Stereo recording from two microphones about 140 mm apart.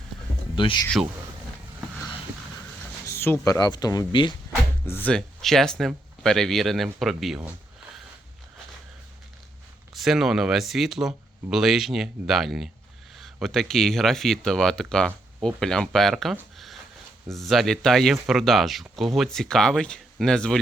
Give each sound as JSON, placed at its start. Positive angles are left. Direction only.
{"t": 0.5, "sound": "speech", "side_deg": 35}
{"t": 3.1, "sound": "a sound", "side_deg": 15}
{"t": 3.4, "sound": "speech", "side_deg": 25}
{"t": 4.9, "sound": "speech", "side_deg": 10}
{"t": 9.9, "sound": "speech", "side_deg": 0}